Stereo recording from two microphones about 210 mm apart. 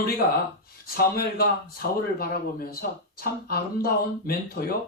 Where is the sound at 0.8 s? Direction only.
45° left (ahead or behind).